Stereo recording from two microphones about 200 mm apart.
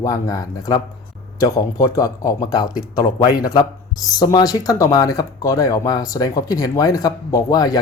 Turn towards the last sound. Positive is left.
turn(degrees=20)  # may be behind; listen again after turning